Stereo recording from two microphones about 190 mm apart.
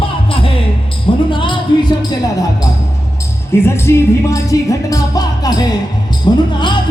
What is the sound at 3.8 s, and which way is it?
Music, 15° left (ahead or behind).